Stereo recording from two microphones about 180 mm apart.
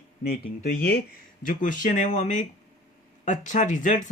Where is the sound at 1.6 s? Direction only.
45° left (ahead or behind).